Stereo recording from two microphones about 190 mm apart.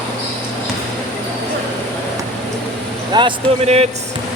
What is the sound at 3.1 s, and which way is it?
Speech, 30° right (ahead or behind).